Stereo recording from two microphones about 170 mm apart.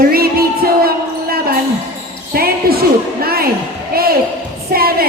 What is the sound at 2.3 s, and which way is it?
A woman's voice, 65° right (ahead or behind).